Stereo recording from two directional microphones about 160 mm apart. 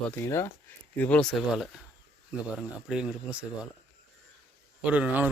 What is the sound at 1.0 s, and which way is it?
Speech, 5° left (ahead or behind).